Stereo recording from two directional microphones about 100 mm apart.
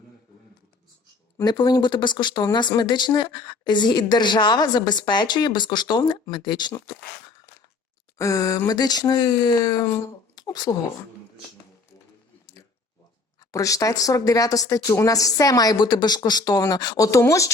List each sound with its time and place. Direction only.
1.5 s speech: 45° left (ahead or behind)
8.2 s speech: 35° left (ahead or behind)
13.4 s speech: 35° left (ahead or behind)